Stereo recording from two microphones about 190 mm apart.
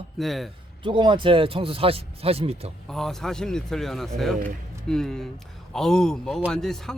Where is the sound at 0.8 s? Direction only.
25° right (ahead or behind).